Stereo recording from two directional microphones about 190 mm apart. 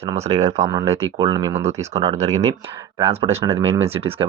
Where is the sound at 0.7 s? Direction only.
20° right (ahead or behind).